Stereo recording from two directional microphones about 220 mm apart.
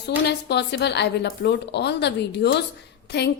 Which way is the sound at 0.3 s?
50° left (ahead or behind).